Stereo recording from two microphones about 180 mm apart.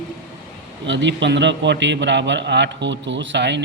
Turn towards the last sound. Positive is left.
turn(degrees=-75)  # may be behind; listen again after turning